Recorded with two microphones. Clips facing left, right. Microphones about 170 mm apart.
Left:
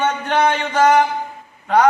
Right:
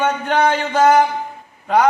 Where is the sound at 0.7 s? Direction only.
10° right (ahead or behind).